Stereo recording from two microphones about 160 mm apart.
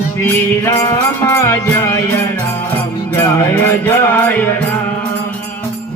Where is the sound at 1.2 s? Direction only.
15° left (ahead or behind).